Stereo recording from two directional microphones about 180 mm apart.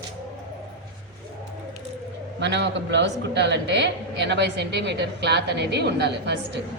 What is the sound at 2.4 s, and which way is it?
A man's voice, 75° right (ahead or behind).